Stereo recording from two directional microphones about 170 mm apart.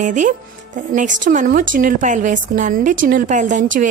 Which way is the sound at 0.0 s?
45° right (ahead or behind).